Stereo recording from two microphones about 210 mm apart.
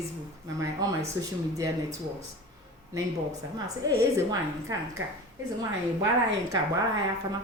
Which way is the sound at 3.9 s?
15° right (ahead or behind).